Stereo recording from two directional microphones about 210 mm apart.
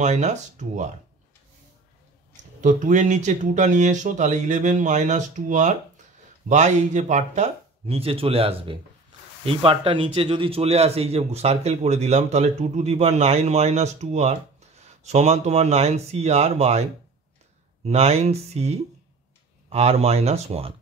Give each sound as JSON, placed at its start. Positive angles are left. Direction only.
{"t": 0.0, "sound": "a man's voice", "side_deg": -35}
{"t": 2.6, "sound": "a man's voice", "side_deg": -35}
{"t": 17.8, "sound": "speech", "side_deg": -30}